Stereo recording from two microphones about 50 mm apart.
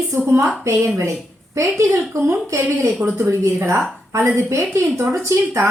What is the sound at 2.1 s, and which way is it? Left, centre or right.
Speech, right.